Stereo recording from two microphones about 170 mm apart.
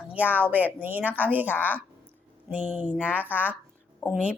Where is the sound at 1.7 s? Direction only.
10° right (ahead or behind).